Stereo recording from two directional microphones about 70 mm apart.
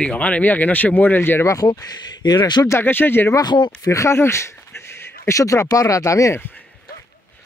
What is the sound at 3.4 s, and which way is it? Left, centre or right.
Speech, left.